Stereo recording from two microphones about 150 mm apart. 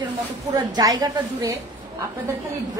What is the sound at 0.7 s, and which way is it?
Speech, 25° right (ahead or behind).